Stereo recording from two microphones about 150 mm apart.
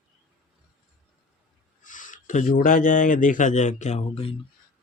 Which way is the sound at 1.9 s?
60° left (ahead or behind).